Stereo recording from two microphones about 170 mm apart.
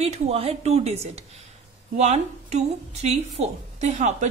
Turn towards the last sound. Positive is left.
turn(degrees=-45)  # may be behind; listen again after turning